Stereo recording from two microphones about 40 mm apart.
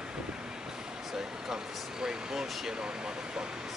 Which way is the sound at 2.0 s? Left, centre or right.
Centre.